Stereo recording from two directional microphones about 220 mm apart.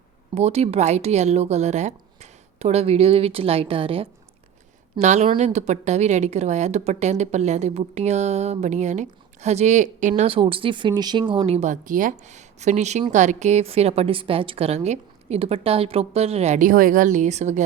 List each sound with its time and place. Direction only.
0.3 s a woman's voice: 30° right (ahead or behind)